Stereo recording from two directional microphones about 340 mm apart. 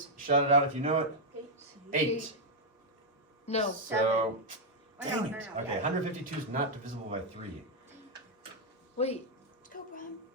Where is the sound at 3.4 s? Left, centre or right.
Centre.